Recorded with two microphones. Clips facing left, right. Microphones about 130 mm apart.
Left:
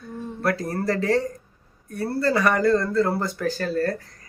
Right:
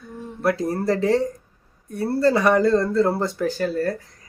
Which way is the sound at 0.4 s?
20° right (ahead or behind).